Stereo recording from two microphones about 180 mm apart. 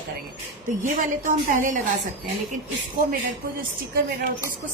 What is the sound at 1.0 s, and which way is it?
Speech, 45° right (ahead or behind).